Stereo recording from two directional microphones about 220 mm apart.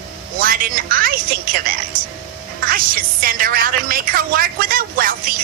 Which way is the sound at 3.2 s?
40° right (ahead or behind).